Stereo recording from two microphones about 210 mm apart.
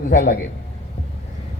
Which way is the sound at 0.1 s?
40° left (ahead or behind).